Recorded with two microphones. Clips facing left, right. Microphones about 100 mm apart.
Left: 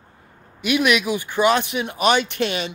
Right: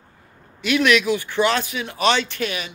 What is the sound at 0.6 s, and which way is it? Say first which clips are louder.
Speech: right 1 dB; 15° left (ahead or behind).